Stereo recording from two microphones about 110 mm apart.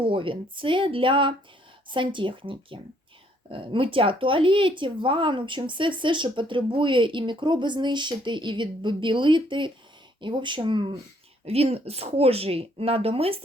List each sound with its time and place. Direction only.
0.0 s speech: 50° right (ahead or behind)
11.4 s speech: 65° right (ahead or behind)